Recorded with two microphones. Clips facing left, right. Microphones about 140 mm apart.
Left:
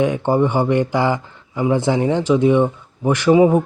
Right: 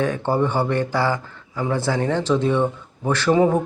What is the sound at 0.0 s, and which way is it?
Speech, 15° left (ahead or behind).